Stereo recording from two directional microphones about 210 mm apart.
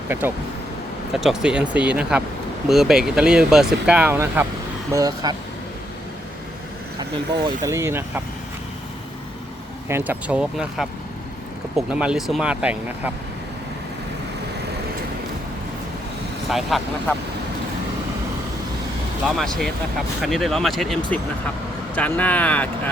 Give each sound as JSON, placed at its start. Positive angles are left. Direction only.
{"t": 0.1, "sound": "speech", "side_deg": -10}
{"t": 7.6, "sound": "speech", "side_deg": -15}
{"t": 9.9, "sound": "speech", "side_deg": -10}
{"t": 11.9, "sound": "speech", "side_deg": -5}
{"t": 16.5, "sound": "speech", "side_deg": 0}
{"t": 19.4, "sound": "speech", "side_deg": 0}